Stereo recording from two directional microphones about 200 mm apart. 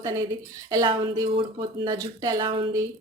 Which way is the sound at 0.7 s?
20° right (ahead or behind).